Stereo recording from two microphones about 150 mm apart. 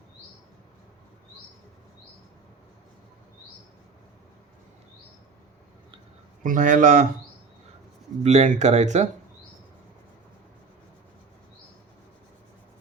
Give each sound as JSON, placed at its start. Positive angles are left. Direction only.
{"t": 6.4, "sound": "speech", "side_deg": -60}
{"t": 8.2, "sound": "speech", "side_deg": -50}